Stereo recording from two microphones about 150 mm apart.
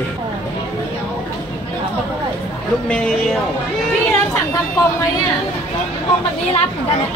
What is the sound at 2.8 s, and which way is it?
Speech, 5° left (ahead or behind).